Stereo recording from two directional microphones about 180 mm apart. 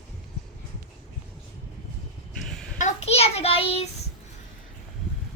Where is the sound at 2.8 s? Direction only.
40° left (ahead or behind).